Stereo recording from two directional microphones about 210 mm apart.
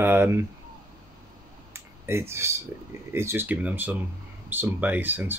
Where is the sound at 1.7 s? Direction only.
10° right (ahead or behind).